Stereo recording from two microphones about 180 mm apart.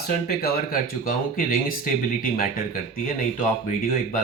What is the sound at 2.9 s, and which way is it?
Speech, 50° left (ahead or behind).